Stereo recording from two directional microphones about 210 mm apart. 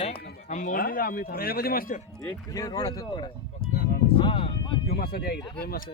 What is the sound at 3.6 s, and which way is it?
Music, 45° left (ahead or behind).